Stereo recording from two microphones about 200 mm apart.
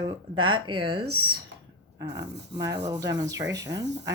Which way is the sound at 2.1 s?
15° right (ahead or behind).